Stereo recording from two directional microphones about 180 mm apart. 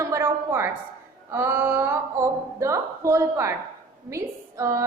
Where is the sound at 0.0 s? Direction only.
15° right (ahead or behind).